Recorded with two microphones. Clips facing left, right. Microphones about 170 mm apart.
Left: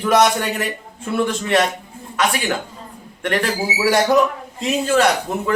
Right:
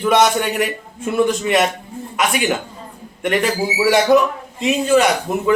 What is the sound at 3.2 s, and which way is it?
A man's voice, 5° right (ahead or behind).